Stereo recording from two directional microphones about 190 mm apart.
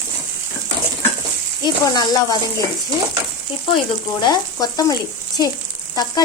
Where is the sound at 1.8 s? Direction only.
20° left (ahead or behind).